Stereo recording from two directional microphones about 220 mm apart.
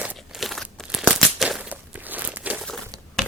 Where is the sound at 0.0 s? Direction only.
5° right (ahead or behind).